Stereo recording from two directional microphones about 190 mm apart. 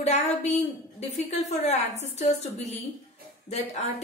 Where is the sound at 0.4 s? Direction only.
35° left (ahead or behind).